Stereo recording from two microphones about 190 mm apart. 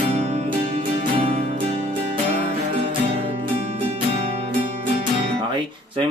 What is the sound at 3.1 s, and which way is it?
Music, 30° right (ahead or behind).